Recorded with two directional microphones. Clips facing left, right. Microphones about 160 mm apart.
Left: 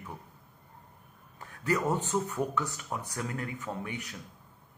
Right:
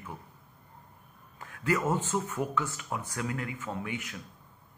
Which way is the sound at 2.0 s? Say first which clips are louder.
Left 1 dB; 15° left (ahead or behind).